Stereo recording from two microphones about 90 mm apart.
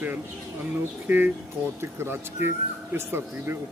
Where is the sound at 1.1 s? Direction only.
20° right (ahead or behind).